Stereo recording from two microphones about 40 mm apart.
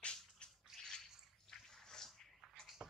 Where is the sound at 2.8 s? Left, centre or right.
Centre.